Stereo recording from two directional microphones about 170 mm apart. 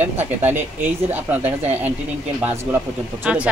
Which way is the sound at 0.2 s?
10° right (ahead or behind).